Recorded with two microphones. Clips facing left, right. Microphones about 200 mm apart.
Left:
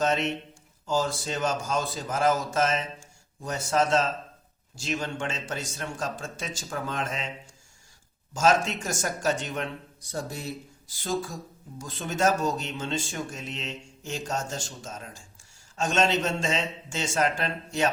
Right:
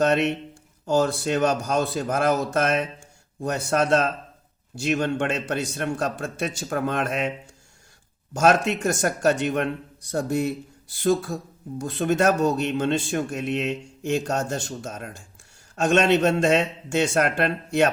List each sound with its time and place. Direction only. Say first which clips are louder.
0.0 s speech: right 5 dB; 60° right (ahead or behind)